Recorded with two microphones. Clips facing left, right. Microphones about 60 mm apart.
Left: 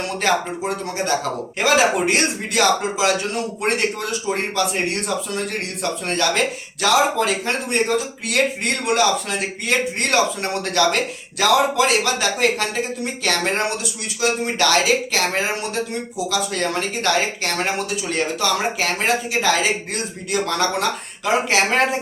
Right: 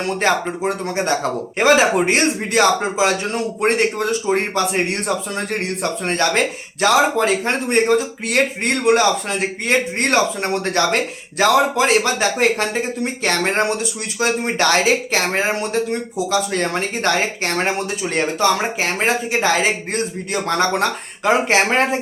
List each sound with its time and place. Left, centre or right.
0.2 s speech: right